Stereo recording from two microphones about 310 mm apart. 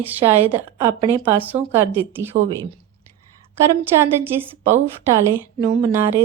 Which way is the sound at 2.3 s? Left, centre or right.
Right.